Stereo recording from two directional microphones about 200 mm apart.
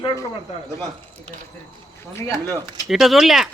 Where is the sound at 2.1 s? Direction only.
15° left (ahead or behind).